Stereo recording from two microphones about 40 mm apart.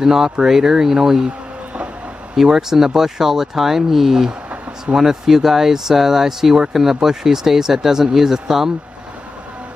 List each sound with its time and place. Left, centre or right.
0.0 s speech: centre
2.3 s speech: centre
4.3 s a sound: right
4.9 s speech: centre